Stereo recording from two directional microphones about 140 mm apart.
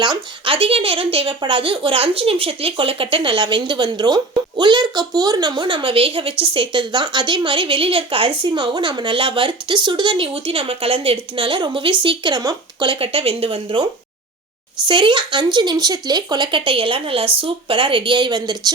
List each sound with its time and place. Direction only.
0.0 s speech: 35° right (ahead or behind)
14.8 s speech: 35° right (ahead or behind)